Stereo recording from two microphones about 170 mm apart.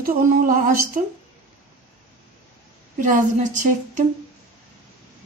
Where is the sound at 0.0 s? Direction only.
55° right (ahead or behind).